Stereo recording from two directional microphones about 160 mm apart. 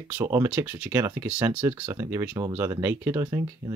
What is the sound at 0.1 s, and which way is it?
Speech, 15° right (ahead or behind).